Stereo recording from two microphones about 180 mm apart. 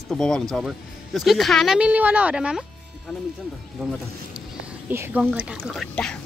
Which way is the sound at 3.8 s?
Centre (ahead or behind).